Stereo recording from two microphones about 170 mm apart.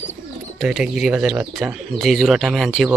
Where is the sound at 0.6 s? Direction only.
Centre (ahead or behind).